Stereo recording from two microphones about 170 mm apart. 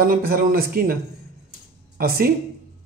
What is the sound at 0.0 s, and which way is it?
Speech, 55° right (ahead or behind).